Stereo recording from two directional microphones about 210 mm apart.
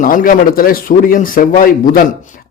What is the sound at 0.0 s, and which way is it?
A man's voice, 40° left (ahead or behind).